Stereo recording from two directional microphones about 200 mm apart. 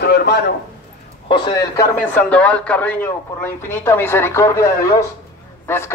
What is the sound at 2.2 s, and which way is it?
Speech, 5° left (ahead or behind).